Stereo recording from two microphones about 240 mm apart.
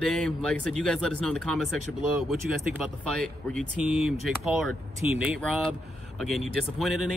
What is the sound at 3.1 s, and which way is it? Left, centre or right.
Speech, centre.